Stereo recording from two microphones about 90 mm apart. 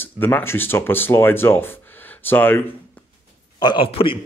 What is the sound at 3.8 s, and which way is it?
Speech, 90° left.